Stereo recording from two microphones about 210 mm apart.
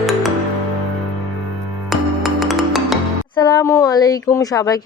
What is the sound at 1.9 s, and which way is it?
Music, centre (ahead or behind).